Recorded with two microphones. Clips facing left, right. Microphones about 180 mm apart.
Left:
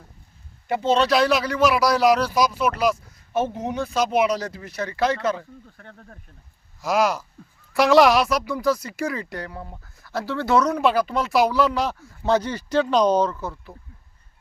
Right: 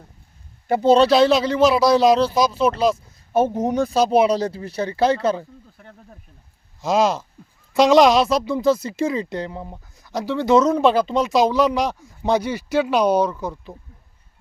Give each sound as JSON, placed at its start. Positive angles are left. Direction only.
{"t": 0.7, "sound": "a woman's voice", "side_deg": -40}
{"t": 3.3, "sound": "speech", "side_deg": -40}
{"t": 5.7, "sound": "speech", "side_deg": -10}
{"t": 6.8, "sound": "a woman's voice", "side_deg": -25}